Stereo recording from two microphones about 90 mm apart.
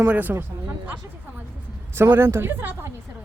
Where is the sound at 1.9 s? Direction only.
25° right (ahead or behind).